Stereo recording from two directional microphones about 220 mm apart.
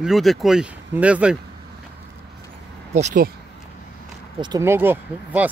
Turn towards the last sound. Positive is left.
turn(degrees=-10)  # may be behind; listen again after turning